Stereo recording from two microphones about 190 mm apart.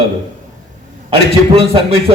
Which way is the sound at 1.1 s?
30° right (ahead or behind).